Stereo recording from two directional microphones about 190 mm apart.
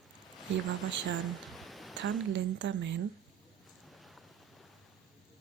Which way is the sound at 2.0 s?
70° right (ahead or behind).